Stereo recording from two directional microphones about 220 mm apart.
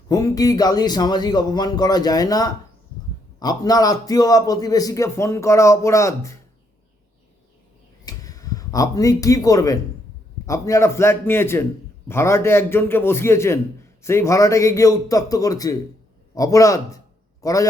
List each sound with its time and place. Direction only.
0.1 s a man's voice: 15° left (ahead or behind)
8.0 s a sound: 15° left (ahead or behind)
10.4 s a man's voice: 15° left (ahead or behind)